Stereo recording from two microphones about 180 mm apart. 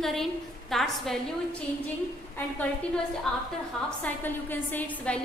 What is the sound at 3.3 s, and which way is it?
A woman's voice, 5° left (ahead or behind).